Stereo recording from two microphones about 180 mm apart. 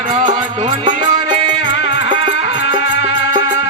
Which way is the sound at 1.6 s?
85° left.